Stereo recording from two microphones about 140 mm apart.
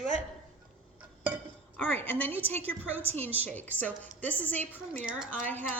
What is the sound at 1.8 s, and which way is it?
Speech, 15° left (ahead or behind).